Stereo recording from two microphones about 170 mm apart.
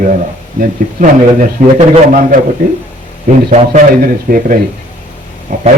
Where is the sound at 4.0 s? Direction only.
55° right (ahead or behind).